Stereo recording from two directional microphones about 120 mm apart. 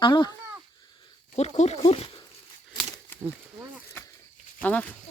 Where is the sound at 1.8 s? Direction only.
50° left (ahead or behind).